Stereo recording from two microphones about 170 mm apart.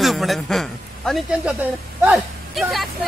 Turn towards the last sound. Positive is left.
turn(degrees=0)  # may be behind; listen again after turning